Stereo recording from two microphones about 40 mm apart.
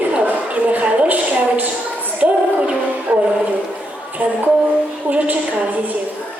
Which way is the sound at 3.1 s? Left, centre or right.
Right.